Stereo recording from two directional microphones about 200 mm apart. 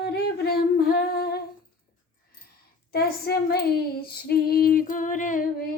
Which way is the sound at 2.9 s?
50° left (ahead or behind).